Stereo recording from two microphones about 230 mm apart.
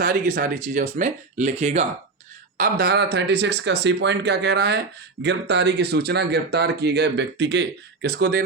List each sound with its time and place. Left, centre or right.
0.0 s speech: right
2.6 s speech: right